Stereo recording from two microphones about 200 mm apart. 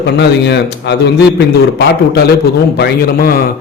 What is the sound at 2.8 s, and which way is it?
Speech, 50° left (ahead or behind).